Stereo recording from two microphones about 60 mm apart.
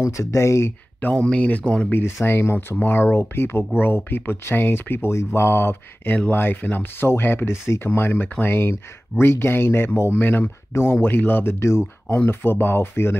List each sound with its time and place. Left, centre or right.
0.0 s speech: left
1.1 s speech: centre
1.9 s speech: left
10.7 s speech: left